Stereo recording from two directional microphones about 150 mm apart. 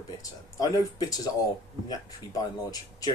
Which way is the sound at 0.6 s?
25° left (ahead or behind).